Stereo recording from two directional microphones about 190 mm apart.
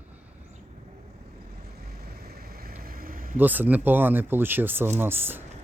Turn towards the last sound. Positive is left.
turn(degrees=-10)  # may be behind; listen again after turning